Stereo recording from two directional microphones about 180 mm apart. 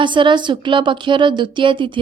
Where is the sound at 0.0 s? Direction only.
25° right (ahead or behind).